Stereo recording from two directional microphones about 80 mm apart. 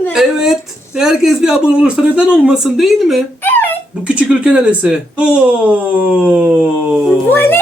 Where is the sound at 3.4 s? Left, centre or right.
Left.